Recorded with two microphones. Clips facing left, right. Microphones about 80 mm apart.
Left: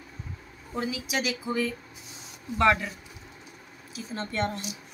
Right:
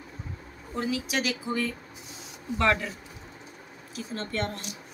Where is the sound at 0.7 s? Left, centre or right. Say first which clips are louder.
Right 1 dB; centre.